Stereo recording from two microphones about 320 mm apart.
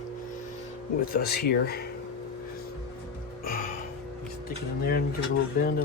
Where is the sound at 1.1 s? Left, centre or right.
Left.